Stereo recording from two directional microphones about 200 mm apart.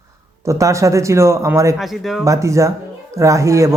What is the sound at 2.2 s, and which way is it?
A man's voice, 15° right (ahead or behind).